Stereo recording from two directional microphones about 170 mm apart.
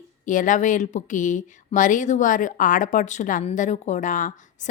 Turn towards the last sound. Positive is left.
turn(degrees=50)  # may be behind; listen again after turning